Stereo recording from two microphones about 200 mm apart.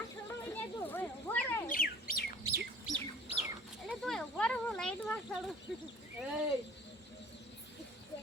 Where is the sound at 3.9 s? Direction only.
Centre (ahead or behind).